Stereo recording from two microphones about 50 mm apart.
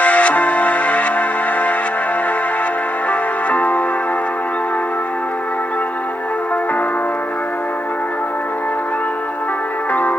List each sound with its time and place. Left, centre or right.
0.0 s music: left
3.1 s music: left
9.9 s music: left